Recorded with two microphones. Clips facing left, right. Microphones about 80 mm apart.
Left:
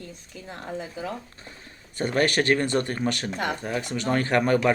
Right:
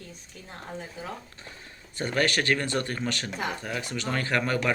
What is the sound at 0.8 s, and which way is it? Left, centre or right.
Speech, left.